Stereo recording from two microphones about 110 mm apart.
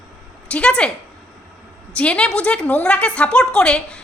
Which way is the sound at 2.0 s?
10° left (ahead or behind).